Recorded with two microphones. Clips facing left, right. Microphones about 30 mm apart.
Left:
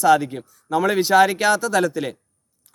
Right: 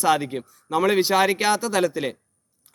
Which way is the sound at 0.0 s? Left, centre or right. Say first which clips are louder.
Left 4 dB; right.